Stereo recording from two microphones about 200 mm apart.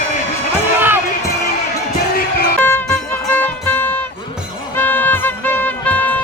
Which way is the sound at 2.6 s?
10° left (ahead or behind).